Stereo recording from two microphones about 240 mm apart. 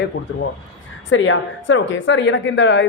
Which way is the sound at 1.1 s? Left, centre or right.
Left.